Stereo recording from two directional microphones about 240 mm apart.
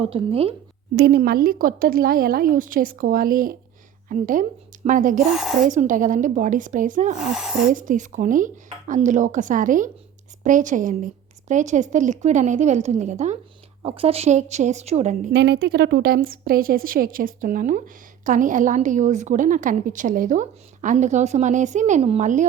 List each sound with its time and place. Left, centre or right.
0.0 s a woman's voice: right
0.9 s a woman's voice: right
5.3 s speech: centre
5.6 s a woman's voice: right
7.3 s speech: centre
7.7 s a woman's voice: right
15.3 s a woman's voice: right